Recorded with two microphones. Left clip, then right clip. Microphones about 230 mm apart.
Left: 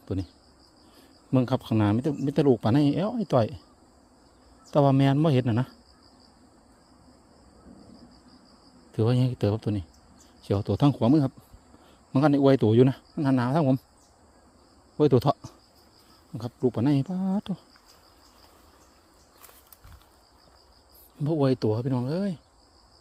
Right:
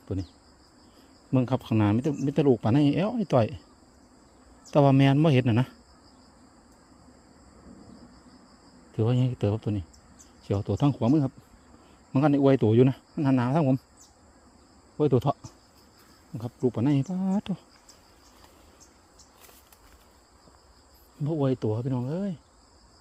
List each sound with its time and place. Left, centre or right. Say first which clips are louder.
0.0 s speech: left 2 dB; centre
1.3 s speech: left 1 dB; centre
4.7 s speech: right 1 dB; centre
8.9 s speech: left 2 dB; centre
14.9 s speech: left 3 dB; centre
21.2 s speech: left 3 dB; centre